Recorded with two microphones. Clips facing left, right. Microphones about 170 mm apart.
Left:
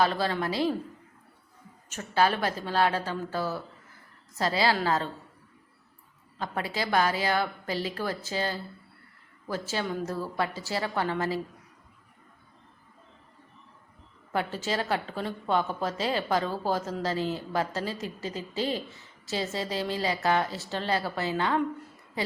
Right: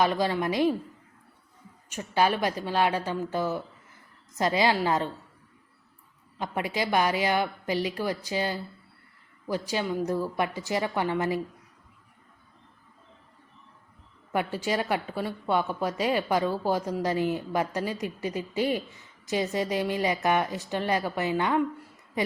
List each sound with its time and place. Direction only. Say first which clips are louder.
0.0 s speech: right 1 dB; 15° right (ahead or behind)
1.9 s speech: right 1 dB; 15° right (ahead or behind)
6.4 s speech: right 2 dB; 15° right (ahead or behind)
14.3 s speech: right 2 dB; 15° right (ahead or behind)